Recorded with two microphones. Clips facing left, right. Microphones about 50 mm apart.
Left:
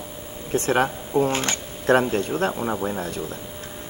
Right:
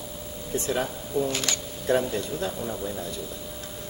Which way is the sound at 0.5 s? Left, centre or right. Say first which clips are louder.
Left 7 dB; left.